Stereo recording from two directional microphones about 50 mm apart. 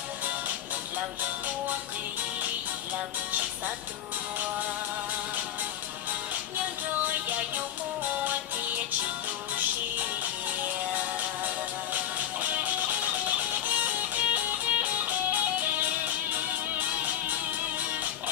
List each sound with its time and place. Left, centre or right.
7.0 s music: right
10.9 s music: right